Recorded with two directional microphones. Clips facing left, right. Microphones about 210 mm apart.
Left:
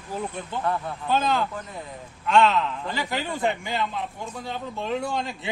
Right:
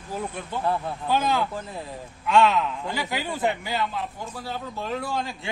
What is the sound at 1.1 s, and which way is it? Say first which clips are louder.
A man's voice: even; 10° right (ahead or behind).